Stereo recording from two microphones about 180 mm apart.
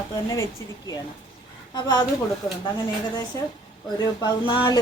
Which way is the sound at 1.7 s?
25° left (ahead or behind).